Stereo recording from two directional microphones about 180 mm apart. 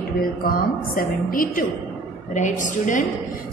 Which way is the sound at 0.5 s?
50° left (ahead or behind).